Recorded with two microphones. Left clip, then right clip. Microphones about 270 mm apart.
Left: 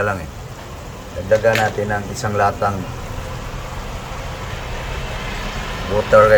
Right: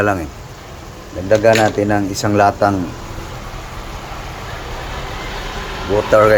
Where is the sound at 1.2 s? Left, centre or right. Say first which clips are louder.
Right 3 dB; right.